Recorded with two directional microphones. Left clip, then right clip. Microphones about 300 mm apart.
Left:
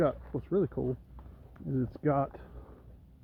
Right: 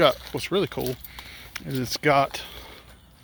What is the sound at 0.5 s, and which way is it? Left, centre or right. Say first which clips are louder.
Speech: right 5 dB; centre.